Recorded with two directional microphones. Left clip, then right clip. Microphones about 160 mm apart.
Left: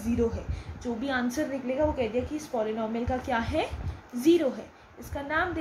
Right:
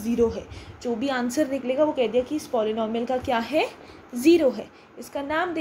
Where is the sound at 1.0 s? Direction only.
50° right (ahead or behind).